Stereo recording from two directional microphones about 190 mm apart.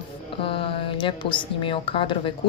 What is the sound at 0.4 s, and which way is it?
A woman's voice, 30° left (ahead or behind).